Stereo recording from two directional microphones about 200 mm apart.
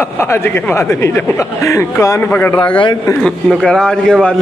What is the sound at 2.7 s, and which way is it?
Speech, 25° left (ahead or behind).